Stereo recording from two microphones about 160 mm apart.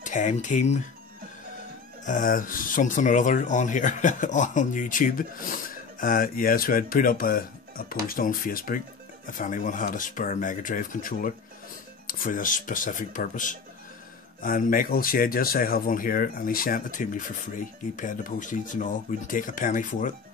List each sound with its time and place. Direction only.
0.0 s speech: 50° left (ahead or behind)
2.0 s speech: 55° left (ahead or behind)